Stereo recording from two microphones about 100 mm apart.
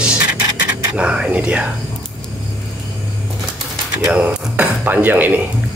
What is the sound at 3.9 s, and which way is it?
Speech, 15° right (ahead or behind).